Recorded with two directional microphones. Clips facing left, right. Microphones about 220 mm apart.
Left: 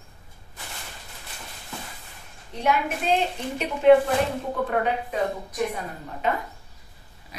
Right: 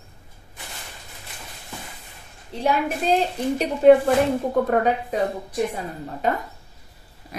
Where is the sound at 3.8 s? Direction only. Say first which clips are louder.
Right 2 dB; 40° right (ahead or behind).